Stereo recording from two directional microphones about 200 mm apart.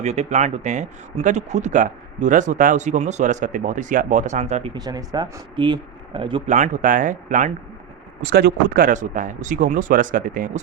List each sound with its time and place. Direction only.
0.0 s speech: 35° right (ahead or behind)
6.5 s speech: 35° right (ahead or behind)